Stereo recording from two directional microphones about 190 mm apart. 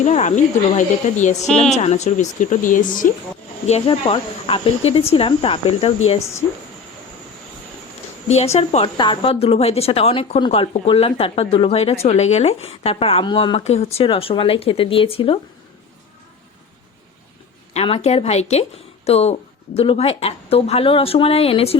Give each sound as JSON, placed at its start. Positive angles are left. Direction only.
{"t": 0.0, "sound": "a woman's voice", "side_deg": 40}
{"t": 1.4, "sound": "a woman's voice", "side_deg": 0}
{"t": 1.7, "sound": "speech", "side_deg": 35}
{"t": 3.7, "sound": "a woman's voice", "side_deg": 30}
{"t": 8.5, "sound": "a woman's voice", "side_deg": 35}
{"t": 17.7, "sound": "a woman's voice", "side_deg": 35}